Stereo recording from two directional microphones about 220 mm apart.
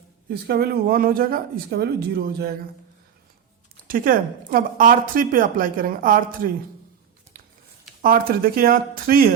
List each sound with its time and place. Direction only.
0.3 s speech: 50° right (ahead or behind)
3.8 s a woman's voice: 40° right (ahead or behind)
8.0 s a woman's voice: 40° right (ahead or behind)